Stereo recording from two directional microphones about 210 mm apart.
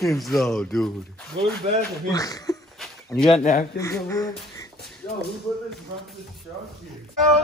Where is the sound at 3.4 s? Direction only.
40° left (ahead or behind).